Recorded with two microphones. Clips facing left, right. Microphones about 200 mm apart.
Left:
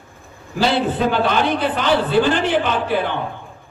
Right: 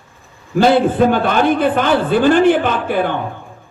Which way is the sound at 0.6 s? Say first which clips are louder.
Right 6 dB; 50° right (ahead or behind).